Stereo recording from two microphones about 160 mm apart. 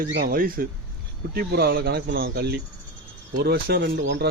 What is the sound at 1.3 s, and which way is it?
Speech, 80° right.